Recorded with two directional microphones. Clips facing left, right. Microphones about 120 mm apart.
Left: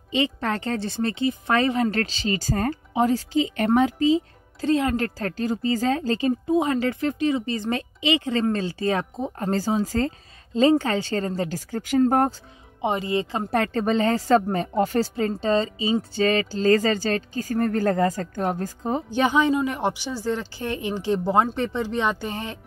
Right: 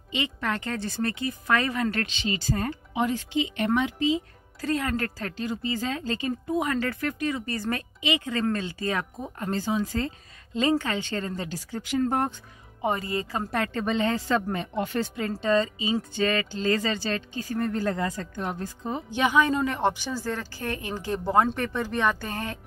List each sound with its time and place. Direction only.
0.1 s speech: 35° left (ahead or behind)
4.6 s speech: 25° left (ahead or behind)
5.2 s speech: 40° left (ahead or behind)
12.8 s speech: 20° left (ahead or behind)
19.5 s speech: 15° left (ahead or behind)